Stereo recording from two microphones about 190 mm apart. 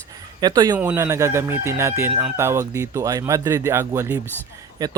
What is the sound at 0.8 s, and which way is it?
Speech, 10° right (ahead or behind).